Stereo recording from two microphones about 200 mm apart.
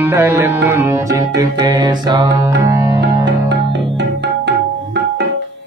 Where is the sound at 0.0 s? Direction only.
10° right (ahead or behind).